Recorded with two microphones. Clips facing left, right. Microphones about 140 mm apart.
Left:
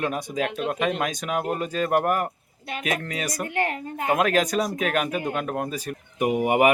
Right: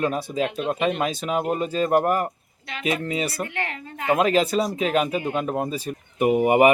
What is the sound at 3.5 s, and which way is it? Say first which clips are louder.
Speech: left 5 dB; 45° left (ahead or behind).